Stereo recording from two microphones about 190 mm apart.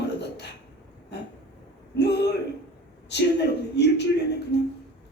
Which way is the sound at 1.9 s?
65° left (ahead or behind).